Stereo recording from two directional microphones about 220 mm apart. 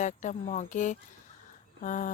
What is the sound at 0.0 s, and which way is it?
Speech, 35° left (ahead or behind).